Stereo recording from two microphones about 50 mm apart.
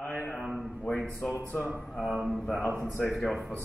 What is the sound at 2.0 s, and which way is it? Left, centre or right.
Speech, centre.